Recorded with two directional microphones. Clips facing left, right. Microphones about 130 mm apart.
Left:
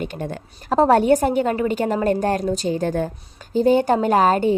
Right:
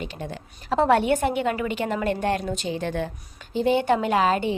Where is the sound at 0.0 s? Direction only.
50° left (ahead or behind).